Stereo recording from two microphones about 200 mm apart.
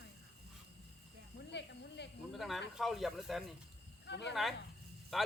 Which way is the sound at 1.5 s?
60° left (ahead or behind).